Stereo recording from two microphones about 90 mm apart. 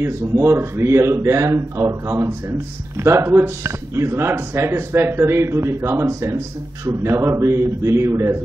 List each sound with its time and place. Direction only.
0.0 s speech: 25° right (ahead or behind)